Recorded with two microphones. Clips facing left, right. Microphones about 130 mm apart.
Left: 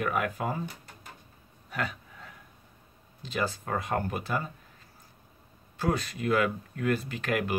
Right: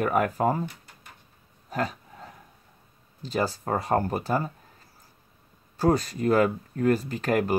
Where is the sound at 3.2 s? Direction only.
35° right (ahead or behind).